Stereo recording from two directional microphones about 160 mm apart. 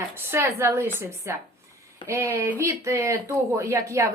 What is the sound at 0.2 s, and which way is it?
A woman's voice, 15° right (ahead or behind).